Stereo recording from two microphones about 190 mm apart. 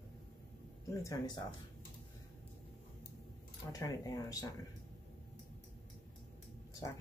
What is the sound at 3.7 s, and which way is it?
Speech, 20° left (ahead or behind).